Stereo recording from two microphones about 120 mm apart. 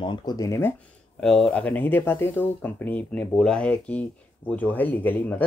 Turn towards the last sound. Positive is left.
turn(degrees=15)  # may be behind; listen again after turning